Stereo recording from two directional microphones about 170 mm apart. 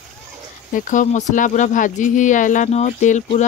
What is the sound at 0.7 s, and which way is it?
Speech, 50° left (ahead or behind).